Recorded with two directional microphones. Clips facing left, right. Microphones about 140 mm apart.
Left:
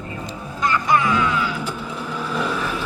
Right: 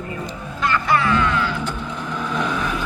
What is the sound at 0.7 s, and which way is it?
Music, 15° left (ahead or behind).